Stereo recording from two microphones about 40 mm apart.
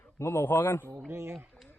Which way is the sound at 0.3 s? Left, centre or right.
Left.